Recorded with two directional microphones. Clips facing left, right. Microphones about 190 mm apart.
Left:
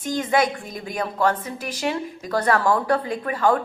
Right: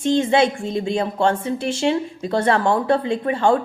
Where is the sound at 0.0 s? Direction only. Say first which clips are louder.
Right 5 dB; 25° right (ahead or behind).